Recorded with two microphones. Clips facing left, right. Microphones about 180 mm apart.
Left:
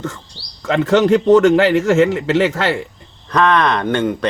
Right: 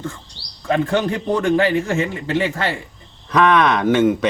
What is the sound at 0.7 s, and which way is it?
A man's voice, 85° left.